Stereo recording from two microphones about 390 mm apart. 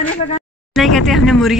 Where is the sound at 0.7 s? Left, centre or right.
Centre.